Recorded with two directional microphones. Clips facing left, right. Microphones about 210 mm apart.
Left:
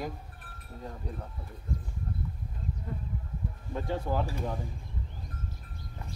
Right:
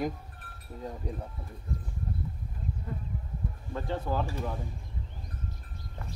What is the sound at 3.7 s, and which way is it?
Speech, 15° left (ahead or behind).